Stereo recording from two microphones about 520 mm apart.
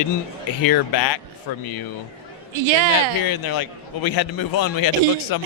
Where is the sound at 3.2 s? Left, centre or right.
Left.